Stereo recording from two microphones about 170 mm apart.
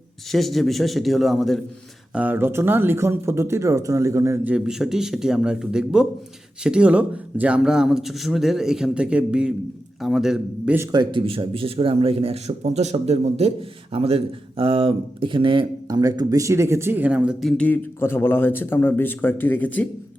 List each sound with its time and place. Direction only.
0.3 s speech: centre (ahead or behind)
2.1 s speech: 10° right (ahead or behind)
4.5 s speech: 5° right (ahead or behind)
10.8 s speech: 25° right (ahead or behind); by 17.5 s 5° right (ahead or behind)
17.6 s speech: 10° left (ahead or behind)